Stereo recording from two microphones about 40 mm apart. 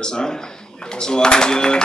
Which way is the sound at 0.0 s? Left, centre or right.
Centre.